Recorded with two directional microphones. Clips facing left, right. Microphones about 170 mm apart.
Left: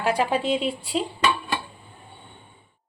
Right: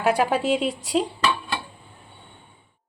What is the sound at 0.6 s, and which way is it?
Speech, 40° right (ahead or behind).